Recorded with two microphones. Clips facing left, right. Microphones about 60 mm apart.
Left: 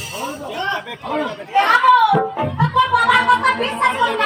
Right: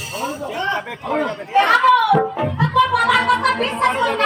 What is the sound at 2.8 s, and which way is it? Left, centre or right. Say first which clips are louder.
Music: left 1 dB; centre.